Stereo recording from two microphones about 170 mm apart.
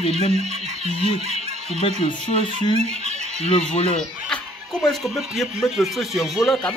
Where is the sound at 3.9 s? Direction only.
5° left (ahead or behind).